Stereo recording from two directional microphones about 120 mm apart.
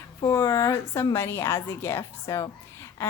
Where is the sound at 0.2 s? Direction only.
30° left (ahead or behind).